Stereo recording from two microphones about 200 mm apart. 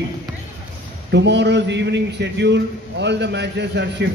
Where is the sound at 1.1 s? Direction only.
60° right (ahead or behind).